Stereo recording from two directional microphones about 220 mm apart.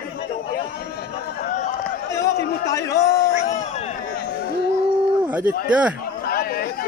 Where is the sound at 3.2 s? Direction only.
35° left (ahead or behind).